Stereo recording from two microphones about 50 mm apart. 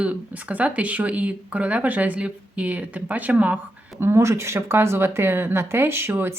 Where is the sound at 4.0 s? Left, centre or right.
Right.